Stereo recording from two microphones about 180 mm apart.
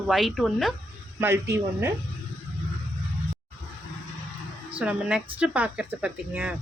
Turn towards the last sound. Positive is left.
turn(degrees=-10)  # may be behind; listen again after turning